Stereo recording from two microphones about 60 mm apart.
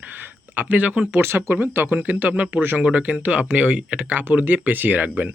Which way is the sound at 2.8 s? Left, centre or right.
Right.